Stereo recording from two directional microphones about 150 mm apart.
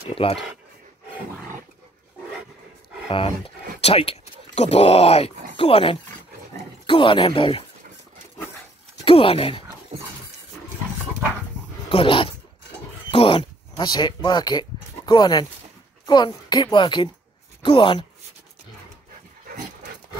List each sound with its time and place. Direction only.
0.1 s speech: 35° left (ahead or behind)
3.1 s speech: 35° left (ahead or behind)
9.0 s speech: 40° left (ahead or behind)
11.9 s dog: 35° left (ahead or behind)
13.1 s a sound: 35° left (ahead or behind)
16.1 s speech: 30° left (ahead or behind)